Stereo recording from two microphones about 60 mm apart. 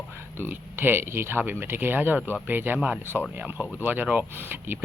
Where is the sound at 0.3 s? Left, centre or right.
Right.